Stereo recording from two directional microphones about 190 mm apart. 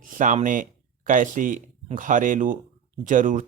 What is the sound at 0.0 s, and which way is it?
Speech, 45° right (ahead or behind).